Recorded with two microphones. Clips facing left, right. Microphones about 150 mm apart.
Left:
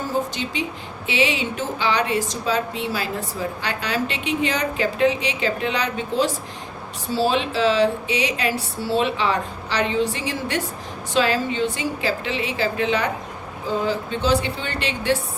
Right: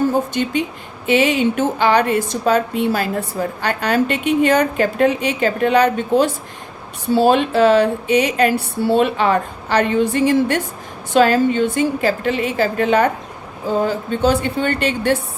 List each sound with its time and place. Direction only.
0.1 s a woman's voice: 55° right (ahead or behind)